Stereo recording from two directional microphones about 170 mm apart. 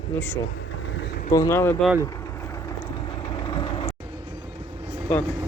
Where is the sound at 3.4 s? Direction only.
30° left (ahead or behind).